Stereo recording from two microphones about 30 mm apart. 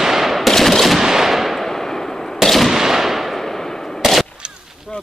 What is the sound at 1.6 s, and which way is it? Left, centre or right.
Fireworks, centre.